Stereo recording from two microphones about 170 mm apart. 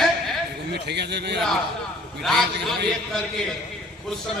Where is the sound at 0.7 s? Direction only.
80° right.